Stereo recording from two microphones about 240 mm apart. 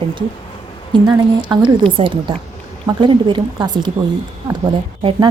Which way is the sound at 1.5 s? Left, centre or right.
Centre.